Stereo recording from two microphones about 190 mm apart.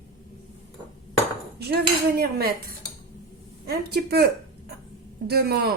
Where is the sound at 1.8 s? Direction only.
55° right (ahead or behind).